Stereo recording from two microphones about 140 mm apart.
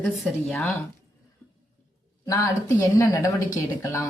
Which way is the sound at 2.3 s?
25° left (ahead or behind).